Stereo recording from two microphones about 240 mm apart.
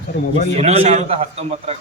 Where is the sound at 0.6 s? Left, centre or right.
Right.